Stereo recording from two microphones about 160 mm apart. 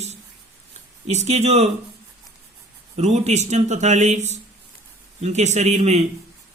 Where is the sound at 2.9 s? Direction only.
45° right (ahead or behind).